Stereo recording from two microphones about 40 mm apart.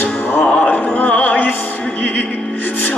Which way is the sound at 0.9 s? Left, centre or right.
Left.